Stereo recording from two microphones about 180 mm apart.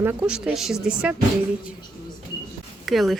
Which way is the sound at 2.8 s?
Centre (ahead or behind).